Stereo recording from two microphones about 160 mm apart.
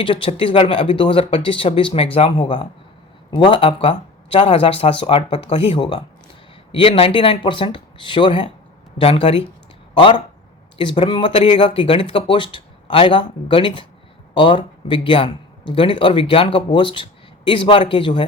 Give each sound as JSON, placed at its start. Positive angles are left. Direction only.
{"t": 0.0, "sound": "a man's voice", "side_deg": 35}